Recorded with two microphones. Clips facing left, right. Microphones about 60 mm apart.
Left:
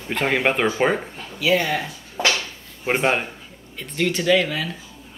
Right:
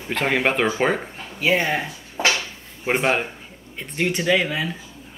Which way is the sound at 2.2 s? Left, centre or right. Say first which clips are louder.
Even; centre.